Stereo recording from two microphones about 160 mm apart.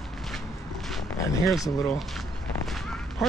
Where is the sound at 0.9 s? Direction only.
Centre (ahead or behind).